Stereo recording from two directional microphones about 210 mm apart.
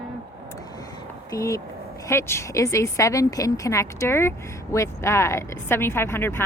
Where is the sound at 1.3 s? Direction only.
15° left (ahead or behind).